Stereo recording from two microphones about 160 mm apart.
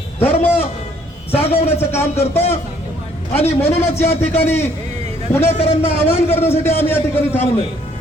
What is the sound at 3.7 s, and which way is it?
Speech, 40° left (ahead or behind).